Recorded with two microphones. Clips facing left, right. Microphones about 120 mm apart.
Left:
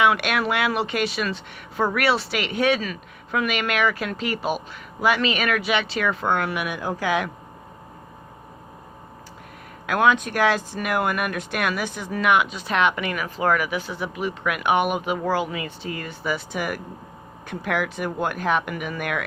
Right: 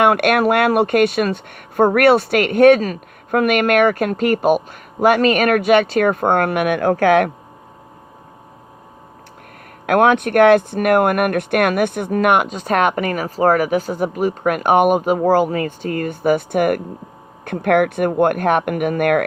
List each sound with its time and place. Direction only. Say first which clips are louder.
0.0 s speech: right 7 dB; 50° right (ahead or behind)
9.8 s speech: right 6 dB; 55° right (ahead or behind)